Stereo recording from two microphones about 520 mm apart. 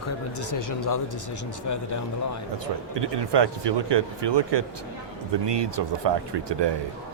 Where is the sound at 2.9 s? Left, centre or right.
Right.